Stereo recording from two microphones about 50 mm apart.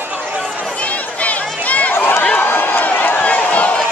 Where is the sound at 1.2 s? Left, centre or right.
Left.